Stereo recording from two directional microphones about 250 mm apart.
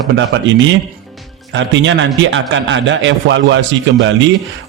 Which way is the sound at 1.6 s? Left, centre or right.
Right.